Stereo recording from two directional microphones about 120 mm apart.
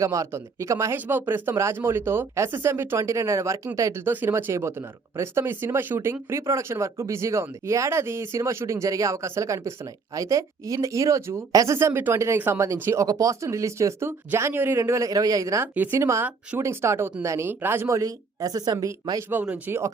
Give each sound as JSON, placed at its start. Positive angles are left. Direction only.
{"t": 0.0, "sound": "speech", "side_deg": -25}
{"t": 19.3, "sound": "speech", "side_deg": -15}